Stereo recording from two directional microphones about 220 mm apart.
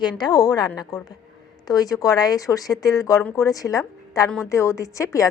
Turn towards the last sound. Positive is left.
turn(degrees=15)  # may be behind; listen again after turning